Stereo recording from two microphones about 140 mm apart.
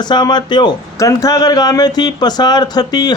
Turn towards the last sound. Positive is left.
turn(degrees=30)  # may be behind; listen again after turning